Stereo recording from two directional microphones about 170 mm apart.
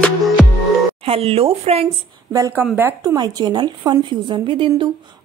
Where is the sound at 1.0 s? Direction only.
35° right (ahead or behind).